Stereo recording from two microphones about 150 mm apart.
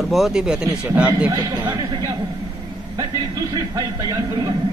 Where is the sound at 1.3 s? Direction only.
25° right (ahead or behind).